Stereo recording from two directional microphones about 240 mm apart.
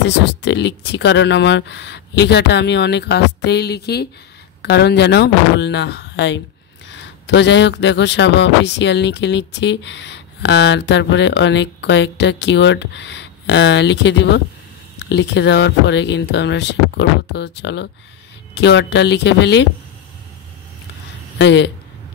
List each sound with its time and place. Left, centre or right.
0.0 s speech: left
21.4 s speech: left